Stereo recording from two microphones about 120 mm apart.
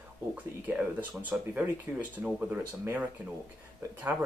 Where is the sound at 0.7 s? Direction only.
15° right (ahead or behind).